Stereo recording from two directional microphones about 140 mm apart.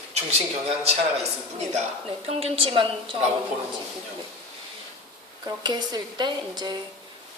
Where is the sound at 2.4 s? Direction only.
40° right (ahead or behind).